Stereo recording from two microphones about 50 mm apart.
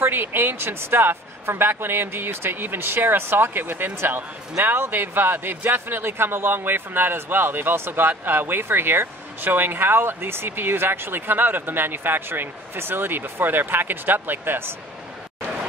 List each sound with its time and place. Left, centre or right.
0.0 s speech: right